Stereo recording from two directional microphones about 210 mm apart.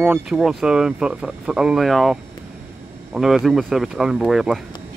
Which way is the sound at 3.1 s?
Centre (ahead or behind).